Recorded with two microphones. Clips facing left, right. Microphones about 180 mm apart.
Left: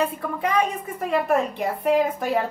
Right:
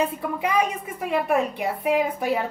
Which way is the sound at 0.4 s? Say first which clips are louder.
Left 1 dB; 10° right (ahead or behind).